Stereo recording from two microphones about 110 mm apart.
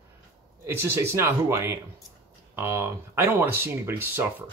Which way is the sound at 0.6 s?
20° right (ahead or behind).